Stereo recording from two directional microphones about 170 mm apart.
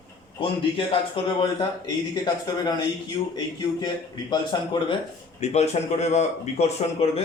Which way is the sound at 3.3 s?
25° left (ahead or behind).